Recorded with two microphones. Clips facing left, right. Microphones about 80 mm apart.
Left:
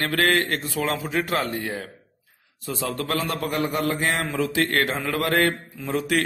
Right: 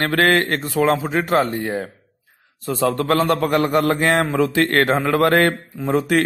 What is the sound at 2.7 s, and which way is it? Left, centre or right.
A man's voice, right.